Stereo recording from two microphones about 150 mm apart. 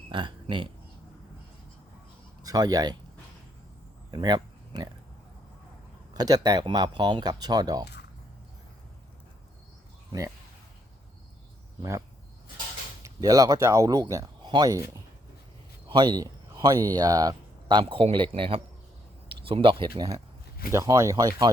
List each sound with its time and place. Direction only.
0.1 s a sound: 35° right (ahead or behind)
2.4 s speech: 25° right (ahead or behind)
4.1 s speech: 30° right (ahead or behind)
6.1 s speech: 25° right (ahead or behind)
11.8 s speech: 20° right (ahead or behind); by 19.9 s 35° right (ahead or behind)
20.7 s speech: 20° right (ahead or behind)